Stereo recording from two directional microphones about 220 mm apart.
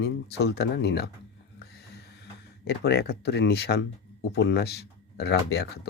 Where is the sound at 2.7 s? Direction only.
45° left (ahead or behind).